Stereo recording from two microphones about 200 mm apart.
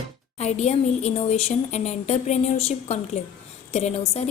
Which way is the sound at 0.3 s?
35° left (ahead or behind).